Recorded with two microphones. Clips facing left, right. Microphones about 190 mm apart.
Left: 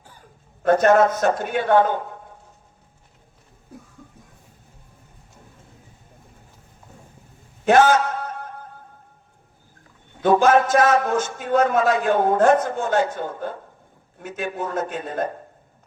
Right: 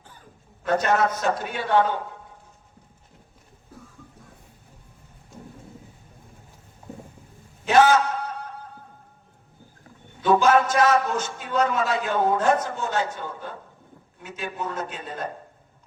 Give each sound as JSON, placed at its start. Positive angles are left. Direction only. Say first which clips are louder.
{"t": 0.6, "sound": "a man's voice", "louder": "left 7 dB", "side_deg": 50}
{"t": 7.6, "sound": "a sound", "louder": "left 2 dB", "side_deg": 50}
{"t": 10.2, "sound": "a man's voice", "louder": "left 3 dB", "side_deg": 50}